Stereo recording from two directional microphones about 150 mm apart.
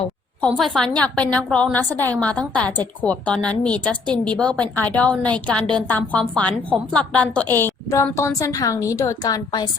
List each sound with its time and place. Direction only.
0.4 s a woman's voice: 5° left (ahead or behind); by 9.6 s 25° left (ahead or behind)